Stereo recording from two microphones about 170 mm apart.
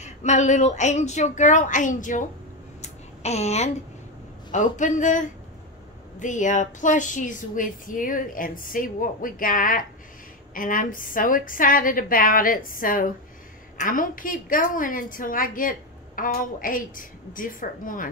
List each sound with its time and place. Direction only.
0.0 s a woman's voice: 45° left (ahead or behind)
2.8 s a sound: 40° left (ahead or behind)
4.5 s a woman's voice: 45° left (ahead or behind)